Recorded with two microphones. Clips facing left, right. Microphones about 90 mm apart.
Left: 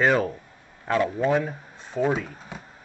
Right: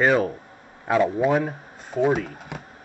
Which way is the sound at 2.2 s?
70° right (ahead or behind).